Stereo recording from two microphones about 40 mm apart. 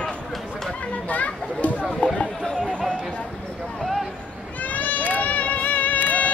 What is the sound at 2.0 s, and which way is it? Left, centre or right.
Speech, left.